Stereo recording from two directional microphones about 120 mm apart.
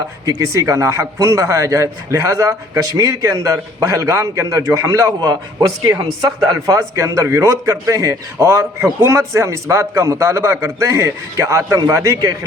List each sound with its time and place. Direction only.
0.3 s a man's voice: 30° right (ahead or behind)